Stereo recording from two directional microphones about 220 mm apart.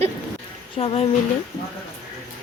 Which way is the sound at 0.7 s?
25° left (ahead or behind).